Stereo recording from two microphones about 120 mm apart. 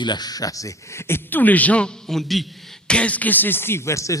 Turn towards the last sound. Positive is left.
turn(degrees=25)  # may be behind; listen again after turning